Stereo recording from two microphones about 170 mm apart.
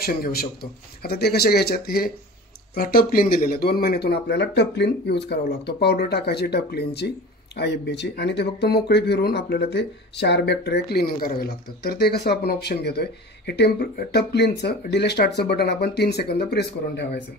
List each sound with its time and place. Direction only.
0.0 s speech: 65° left (ahead or behind); by 17.2 s 80° left